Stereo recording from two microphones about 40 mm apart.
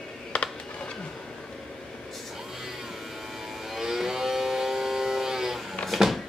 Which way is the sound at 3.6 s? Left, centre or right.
Centre.